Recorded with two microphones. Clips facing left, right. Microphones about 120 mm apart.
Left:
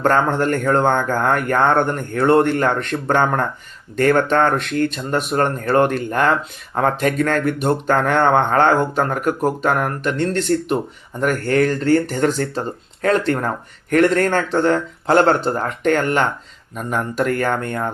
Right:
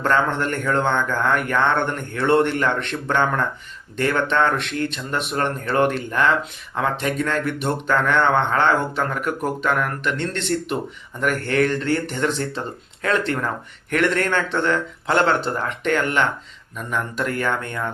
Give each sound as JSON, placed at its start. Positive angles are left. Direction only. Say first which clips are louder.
{"t": 0.0, "sound": "speech", "louder": "left 4 dB", "side_deg": 40}